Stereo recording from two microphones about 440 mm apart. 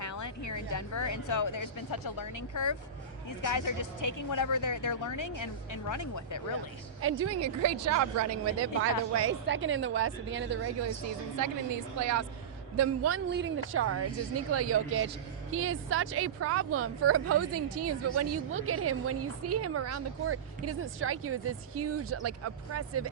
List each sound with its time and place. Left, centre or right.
0.0 s a woman's voice: left
7.0 s a woman's voice: right
11.9 s a woman's voice: right